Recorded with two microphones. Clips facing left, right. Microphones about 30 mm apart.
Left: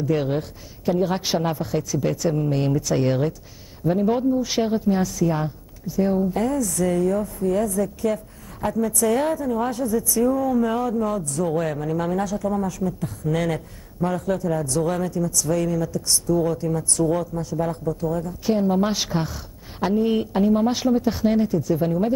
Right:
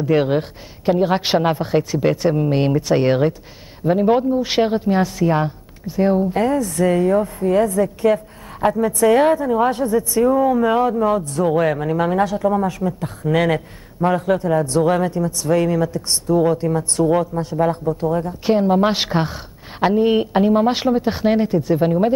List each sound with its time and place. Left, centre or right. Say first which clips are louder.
0.0 s speech: right 6 dB; right